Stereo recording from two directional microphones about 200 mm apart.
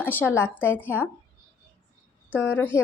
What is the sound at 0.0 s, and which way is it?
Speech, 10° left (ahead or behind).